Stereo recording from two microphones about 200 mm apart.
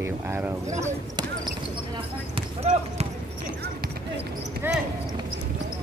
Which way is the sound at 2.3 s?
30° right (ahead or behind).